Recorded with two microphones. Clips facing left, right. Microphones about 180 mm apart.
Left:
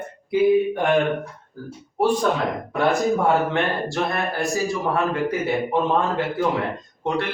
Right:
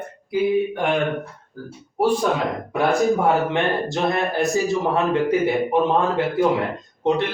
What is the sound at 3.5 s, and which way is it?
Speech, 20° right (ahead or behind).